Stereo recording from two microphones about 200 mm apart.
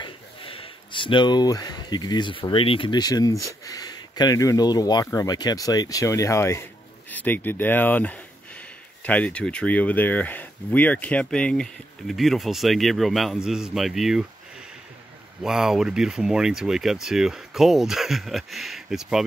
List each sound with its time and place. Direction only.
0.0 s speech: 25° left (ahead or behind); by 14.2 s centre (ahead or behind)
15.4 s speech: 5° right (ahead or behind)